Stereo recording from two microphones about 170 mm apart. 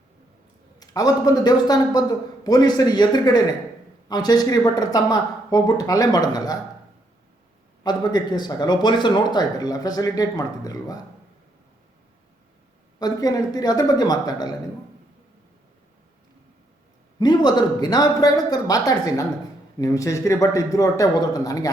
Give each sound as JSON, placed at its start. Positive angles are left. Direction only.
{"t": 0.8, "sound": "speech", "side_deg": 20}
{"t": 7.9, "sound": "speech", "side_deg": 25}
{"t": 13.0, "sound": "speech", "side_deg": 20}
{"t": 17.2, "sound": "speech", "side_deg": 25}